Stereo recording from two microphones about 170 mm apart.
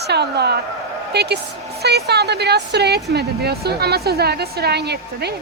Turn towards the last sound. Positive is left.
turn(degrees=-75)  # may be behind; listen again after turning